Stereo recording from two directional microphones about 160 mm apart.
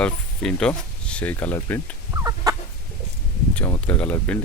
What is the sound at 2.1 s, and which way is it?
Chicken, 20° right (ahead or behind).